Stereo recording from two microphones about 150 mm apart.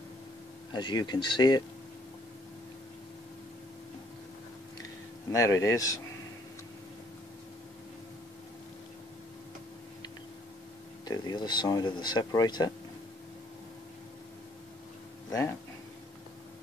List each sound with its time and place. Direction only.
0.7 s speech: 30° left (ahead or behind)
5.3 s speech: 20° left (ahead or behind)
11.1 s speech: 25° left (ahead or behind)